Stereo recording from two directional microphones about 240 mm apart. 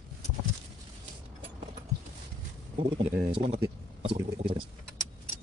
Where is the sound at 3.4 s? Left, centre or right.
Right.